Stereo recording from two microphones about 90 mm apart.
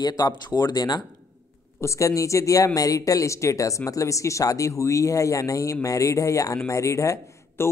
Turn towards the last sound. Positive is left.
turn(degrees=35)  # may be behind; listen again after turning